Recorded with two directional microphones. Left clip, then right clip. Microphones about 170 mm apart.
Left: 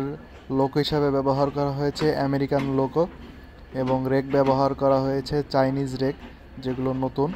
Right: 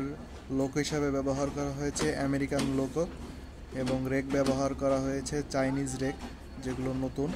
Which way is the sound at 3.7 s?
20° left (ahead or behind).